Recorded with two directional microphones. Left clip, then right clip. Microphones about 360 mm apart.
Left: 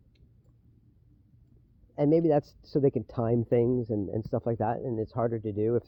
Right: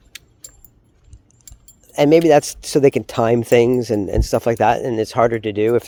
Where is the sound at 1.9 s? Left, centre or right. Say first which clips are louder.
Right 13 dB; centre.